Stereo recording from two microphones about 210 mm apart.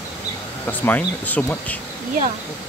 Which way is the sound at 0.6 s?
10° left (ahead or behind).